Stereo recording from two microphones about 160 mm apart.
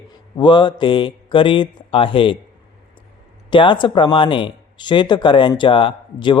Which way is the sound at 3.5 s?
30° left (ahead or behind).